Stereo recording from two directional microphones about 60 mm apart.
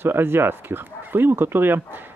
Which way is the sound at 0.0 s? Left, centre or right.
Right.